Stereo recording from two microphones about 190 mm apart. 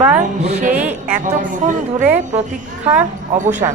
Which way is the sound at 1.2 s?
40° right (ahead or behind).